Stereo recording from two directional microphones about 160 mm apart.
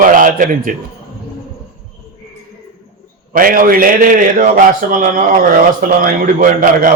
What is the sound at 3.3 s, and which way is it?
A man's voice, 60° right (ahead or behind).